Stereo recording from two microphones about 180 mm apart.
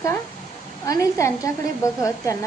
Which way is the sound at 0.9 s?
20° left (ahead or behind).